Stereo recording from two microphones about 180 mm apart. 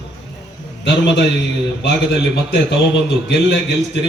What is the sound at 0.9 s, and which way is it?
Speech, 75° left (ahead or behind).